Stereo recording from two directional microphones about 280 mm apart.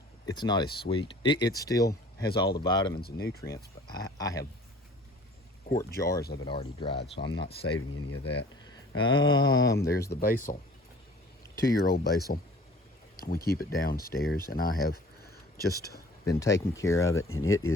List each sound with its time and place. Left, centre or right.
0.3 s speech: centre
3.0 s speech: left
4.2 s speech: centre
5.6 s speech: left
6.0 s speech: centre
7.3 s speech: left
9.0 s speech: centre
10.2 s speech: left
11.6 s speech: left
16.2 s speech: centre
17.2 s speech: left